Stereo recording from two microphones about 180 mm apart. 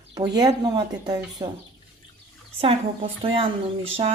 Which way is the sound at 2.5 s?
30° right (ahead or behind).